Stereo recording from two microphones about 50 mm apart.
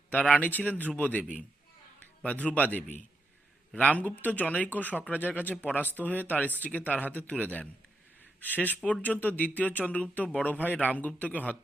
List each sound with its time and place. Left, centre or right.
0.3 s speech: left
2.2 s speech: left